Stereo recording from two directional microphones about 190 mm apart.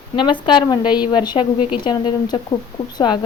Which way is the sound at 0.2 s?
25° left (ahead or behind).